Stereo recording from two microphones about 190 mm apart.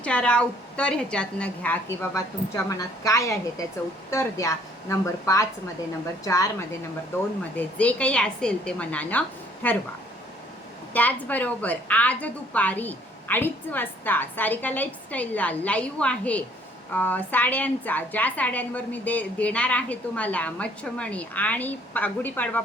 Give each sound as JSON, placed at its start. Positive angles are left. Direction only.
{"t": 0.0, "sound": "a woman's voice", "side_deg": 5}
{"t": 10.9, "sound": "a woman's voice", "side_deg": 10}